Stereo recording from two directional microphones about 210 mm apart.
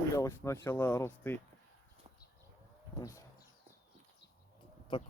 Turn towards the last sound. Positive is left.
turn(degrees=20)  # may be behind; listen again after turning